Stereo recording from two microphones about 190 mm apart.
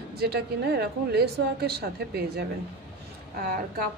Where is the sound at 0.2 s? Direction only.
55° right (ahead or behind).